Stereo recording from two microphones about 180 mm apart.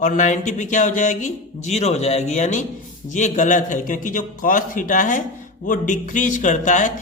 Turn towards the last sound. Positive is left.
turn(degrees=45)  # may be behind; listen again after turning